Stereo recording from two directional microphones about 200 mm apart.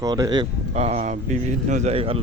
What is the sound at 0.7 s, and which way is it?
Speech, 35° right (ahead or behind).